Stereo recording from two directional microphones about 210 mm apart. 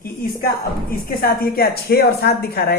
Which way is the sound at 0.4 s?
45° left (ahead or behind).